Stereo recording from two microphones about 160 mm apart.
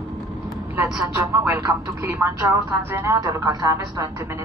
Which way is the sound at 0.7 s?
15° right (ahead or behind).